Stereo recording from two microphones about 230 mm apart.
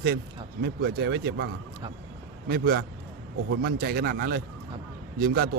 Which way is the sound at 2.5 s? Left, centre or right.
Right.